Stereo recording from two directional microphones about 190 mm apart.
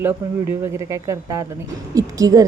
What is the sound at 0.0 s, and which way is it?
A woman's voice, 10° right (ahead or behind).